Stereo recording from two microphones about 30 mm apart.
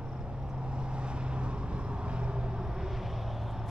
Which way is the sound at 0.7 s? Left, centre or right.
Right.